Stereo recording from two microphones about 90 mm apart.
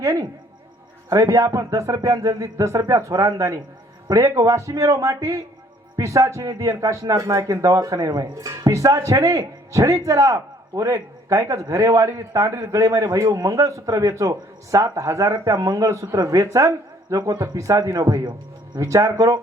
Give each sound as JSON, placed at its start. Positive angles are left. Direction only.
{"t": 0.0, "sound": "speech", "side_deg": -35}
{"t": 18.2, "sound": "a man's voice", "side_deg": -55}
{"t": 18.8, "sound": "speech", "side_deg": -40}